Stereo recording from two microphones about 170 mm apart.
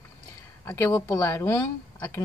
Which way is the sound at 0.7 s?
15° left (ahead or behind).